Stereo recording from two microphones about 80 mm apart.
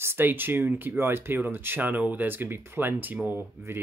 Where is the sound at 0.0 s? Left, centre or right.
Right.